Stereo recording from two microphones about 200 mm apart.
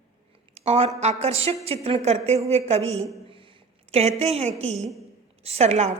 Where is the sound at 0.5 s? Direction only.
30° right (ahead or behind).